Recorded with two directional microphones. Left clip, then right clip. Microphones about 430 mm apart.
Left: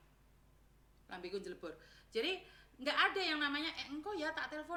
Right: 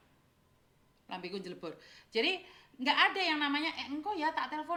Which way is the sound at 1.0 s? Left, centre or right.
Centre.